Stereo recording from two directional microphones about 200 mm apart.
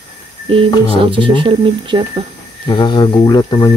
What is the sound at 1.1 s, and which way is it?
Speech, 25° right (ahead or behind).